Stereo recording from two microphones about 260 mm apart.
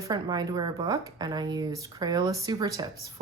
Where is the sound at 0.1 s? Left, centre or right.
Centre.